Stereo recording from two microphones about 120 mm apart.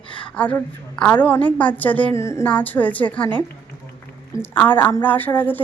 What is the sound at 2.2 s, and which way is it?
Music, 25° left (ahead or behind).